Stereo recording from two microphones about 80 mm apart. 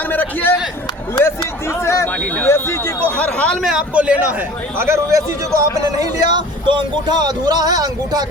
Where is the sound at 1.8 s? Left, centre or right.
Left.